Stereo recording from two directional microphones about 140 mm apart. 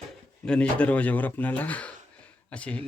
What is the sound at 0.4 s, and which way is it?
Speech, 5° left (ahead or behind).